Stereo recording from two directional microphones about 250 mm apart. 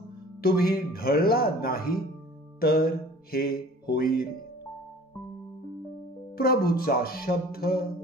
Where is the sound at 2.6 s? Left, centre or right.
Left.